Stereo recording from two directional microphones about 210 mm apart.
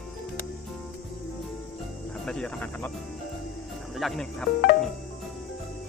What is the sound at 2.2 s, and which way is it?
Speech, 5° left (ahead or behind).